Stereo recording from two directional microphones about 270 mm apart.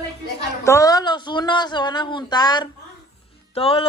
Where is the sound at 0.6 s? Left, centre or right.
Centre.